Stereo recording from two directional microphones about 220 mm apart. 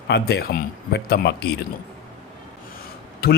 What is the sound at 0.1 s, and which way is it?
A man's voice, 45° left (ahead or behind).